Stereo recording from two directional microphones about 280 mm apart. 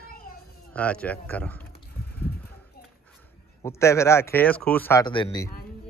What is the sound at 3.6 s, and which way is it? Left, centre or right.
Speech, centre.